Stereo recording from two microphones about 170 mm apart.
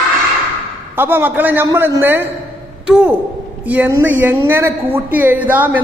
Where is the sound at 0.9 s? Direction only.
10° right (ahead or behind).